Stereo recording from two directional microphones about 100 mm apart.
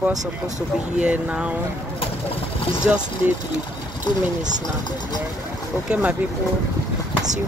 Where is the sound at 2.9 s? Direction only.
15° right (ahead or behind).